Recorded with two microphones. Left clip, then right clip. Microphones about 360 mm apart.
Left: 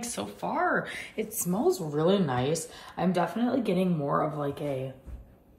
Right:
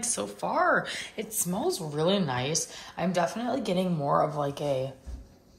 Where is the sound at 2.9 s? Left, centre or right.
Centre.